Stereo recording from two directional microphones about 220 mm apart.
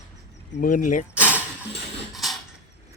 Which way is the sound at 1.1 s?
5° right (ahead or behind).